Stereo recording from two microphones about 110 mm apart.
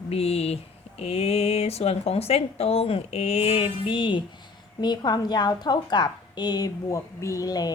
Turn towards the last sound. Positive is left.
turn(degrees=35)  # may be behind; listen again after turning